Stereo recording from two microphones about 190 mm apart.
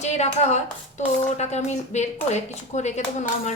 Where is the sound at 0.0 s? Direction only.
35° left (ahead or behind).